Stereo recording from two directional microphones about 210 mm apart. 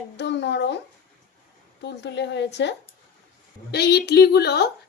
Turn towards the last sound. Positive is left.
turn(degrees=50)  # may be behind; listen again after turning